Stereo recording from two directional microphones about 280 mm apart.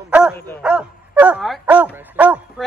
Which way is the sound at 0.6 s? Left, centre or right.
Centre.